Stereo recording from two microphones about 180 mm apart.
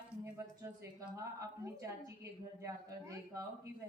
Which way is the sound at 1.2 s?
20° right (ahead or behind).